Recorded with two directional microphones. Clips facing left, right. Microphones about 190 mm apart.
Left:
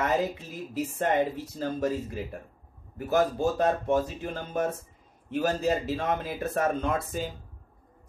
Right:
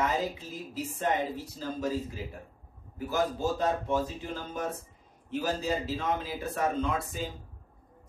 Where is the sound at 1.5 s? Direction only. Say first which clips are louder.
Left 4 dB; 55° left (ahead or behind).